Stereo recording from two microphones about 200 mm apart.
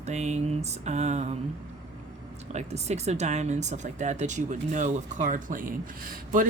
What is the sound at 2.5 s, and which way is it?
Speech, 35° right (ahead or behind).